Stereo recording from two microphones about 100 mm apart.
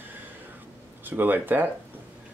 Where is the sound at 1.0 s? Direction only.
20° right (ahead or behind).